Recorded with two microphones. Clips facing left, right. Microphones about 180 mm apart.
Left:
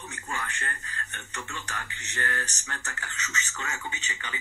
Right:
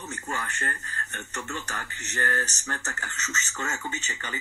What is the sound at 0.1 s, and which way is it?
A man's voice, 40° right (ahead or behind).